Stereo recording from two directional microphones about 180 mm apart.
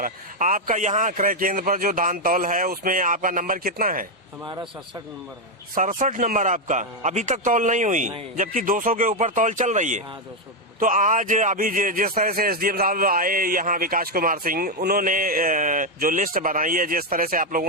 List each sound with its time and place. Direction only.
0.0 s speech: 50° right (ahead or behind)
5.7 s speech: 45° right (ahead or behind)